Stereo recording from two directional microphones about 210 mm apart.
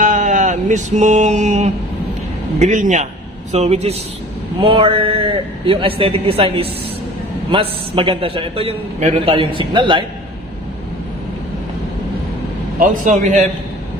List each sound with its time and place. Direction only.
0.0 s mantra: 35° right (ahead or behind)
2.6 s a man's voice: 35° right (ahead or behind)
12.7 s a man's voice: 40° right (ahead or behind)